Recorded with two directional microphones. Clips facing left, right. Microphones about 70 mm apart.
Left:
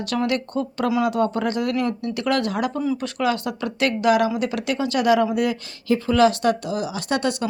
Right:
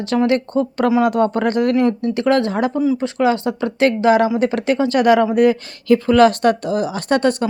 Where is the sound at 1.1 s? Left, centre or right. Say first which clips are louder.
Right 5 dB; right.